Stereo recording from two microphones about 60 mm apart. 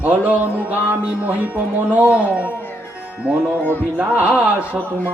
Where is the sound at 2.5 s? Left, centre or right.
Left.